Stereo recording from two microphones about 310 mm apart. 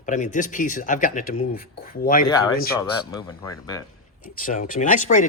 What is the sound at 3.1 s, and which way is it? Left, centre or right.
Speech, centre.